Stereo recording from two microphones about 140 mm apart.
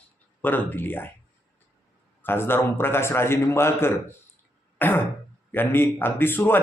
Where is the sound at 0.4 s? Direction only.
15° left (ahead or behind).